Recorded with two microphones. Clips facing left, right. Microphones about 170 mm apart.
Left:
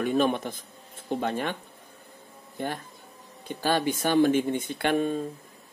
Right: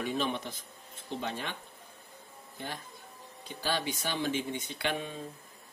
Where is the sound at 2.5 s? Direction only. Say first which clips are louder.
Left 9 dB; 55° left (ahead or behind).